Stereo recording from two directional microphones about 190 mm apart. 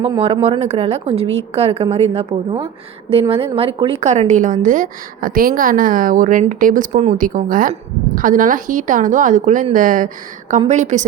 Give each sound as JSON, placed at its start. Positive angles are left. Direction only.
{"t": 0.4, "sound": "a woman's voice", "side_deg": -35}